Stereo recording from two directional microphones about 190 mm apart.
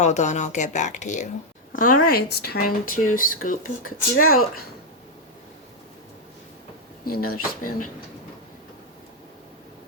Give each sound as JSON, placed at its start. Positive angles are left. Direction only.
{"t": 0.0, "sound": "speech", "side_deg": 40}
{"t": 2.0, "sound": "speech", "side_deg": 55}
{"t": 7.0, "sound": "speech", "side_deg": 50}